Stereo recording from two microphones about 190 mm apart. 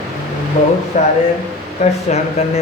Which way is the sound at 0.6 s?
35° left (ahead or behind).